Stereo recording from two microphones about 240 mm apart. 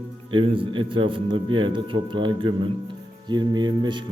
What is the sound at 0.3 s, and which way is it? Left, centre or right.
Speech, right.